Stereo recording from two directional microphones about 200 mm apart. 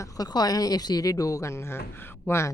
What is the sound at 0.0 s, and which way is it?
Speech, 20° left (ahead or behind).